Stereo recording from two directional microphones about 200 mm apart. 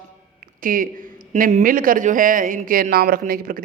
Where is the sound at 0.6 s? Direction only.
45° right (ahead or behind).